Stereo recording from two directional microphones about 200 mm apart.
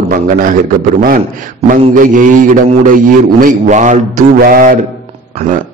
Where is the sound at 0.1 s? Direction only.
45° right (ahead or behind).